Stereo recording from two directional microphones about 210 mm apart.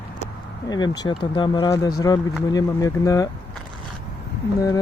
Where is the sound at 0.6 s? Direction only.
20° left (ahead or behind).